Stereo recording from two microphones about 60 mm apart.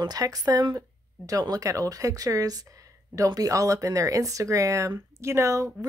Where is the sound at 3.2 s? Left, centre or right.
Right.